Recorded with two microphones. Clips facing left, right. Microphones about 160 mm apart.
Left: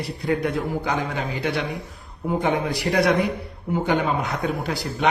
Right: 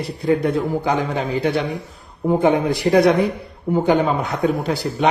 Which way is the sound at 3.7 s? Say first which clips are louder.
Right 5 dB; 35° right (ahead or behind).